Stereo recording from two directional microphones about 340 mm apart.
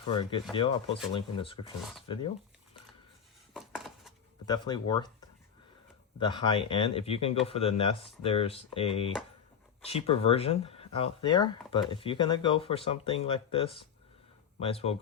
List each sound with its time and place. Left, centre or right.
0.0 s speech: centre
3.5 s dishes: centre
4.4 s speech: centre
6.1 s speech: centre